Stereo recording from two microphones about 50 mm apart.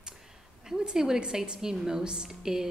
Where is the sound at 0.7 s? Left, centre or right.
Centre.